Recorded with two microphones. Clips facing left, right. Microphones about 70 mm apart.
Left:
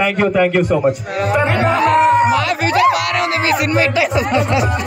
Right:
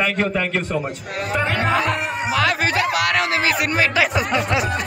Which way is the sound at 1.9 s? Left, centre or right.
Left.